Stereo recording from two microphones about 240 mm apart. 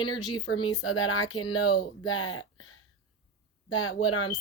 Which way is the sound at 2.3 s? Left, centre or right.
Left.